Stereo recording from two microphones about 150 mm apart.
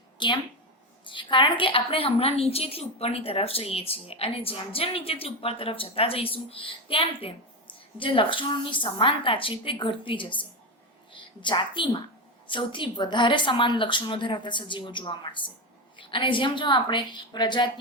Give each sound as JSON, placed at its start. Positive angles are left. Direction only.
{"t": 0.2, "sound": "a woman's voice", "side_deg": 30}